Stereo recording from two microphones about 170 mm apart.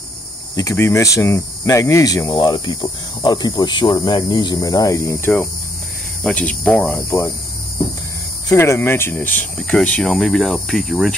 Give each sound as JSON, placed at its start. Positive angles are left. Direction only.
{"t": 0.6, "sound": "speech", "side_deg": 15}
{"t": 7.1, "sound": "speech", "side_deg": 15}
{"t": 8.5, "sound": "speech", "side_deg": 15}